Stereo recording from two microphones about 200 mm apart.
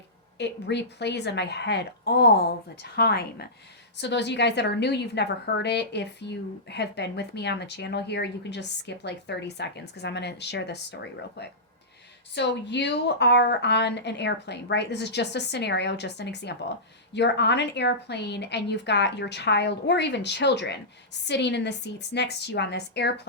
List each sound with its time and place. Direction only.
0.3 s a woman's voice: 60° left (ahead or behind)
12.3 s a woman's voice: 60° left (ahead or behind)